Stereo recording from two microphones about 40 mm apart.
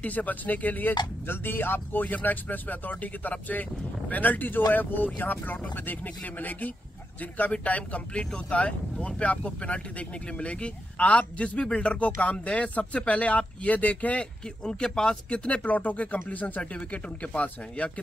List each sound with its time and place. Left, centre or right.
0.0 s speech: left
2.1 s speech: left
5.6 s speech: left
14.6 s speech: centre
15.2 s speech: left
16.7 s speech: left